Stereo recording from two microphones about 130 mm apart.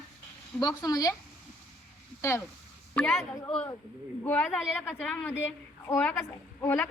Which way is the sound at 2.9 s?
5° left (ahead or behind).